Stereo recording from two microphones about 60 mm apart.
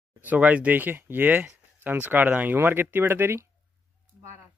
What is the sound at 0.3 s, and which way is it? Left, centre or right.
Speech, right.